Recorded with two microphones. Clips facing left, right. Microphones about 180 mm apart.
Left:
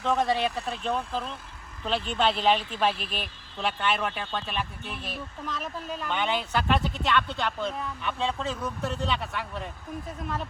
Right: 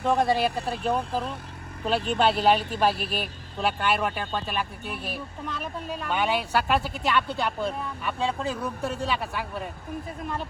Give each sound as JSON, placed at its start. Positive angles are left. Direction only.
{"t": 0.1, "sound": "speech", "side_deg": -5}
{"t": 2.6, "sound": "speech", "side_deg": -45}
{"t": 3.0, "sound": "speech", "side_deg": -5}